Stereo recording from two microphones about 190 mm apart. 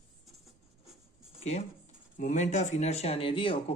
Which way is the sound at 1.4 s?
35° left (ahead or behind).